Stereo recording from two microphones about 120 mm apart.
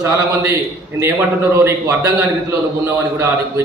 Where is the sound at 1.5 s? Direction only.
25° right (ahead or behind).